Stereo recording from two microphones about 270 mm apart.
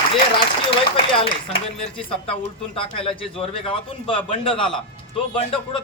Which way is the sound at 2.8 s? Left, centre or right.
Centre.